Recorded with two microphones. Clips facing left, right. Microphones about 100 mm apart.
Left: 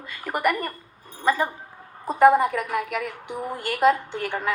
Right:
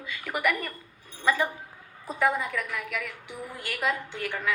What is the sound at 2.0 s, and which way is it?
A woman's voice, 50° left (ahead or behind).